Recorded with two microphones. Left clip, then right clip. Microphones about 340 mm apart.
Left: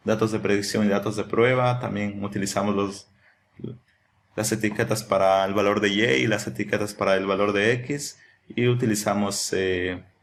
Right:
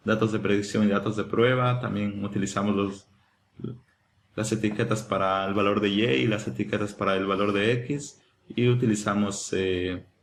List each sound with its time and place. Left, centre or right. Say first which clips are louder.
0.0 s speech: left 2 dB; centre
4.4 s speech: left 3 dB; centre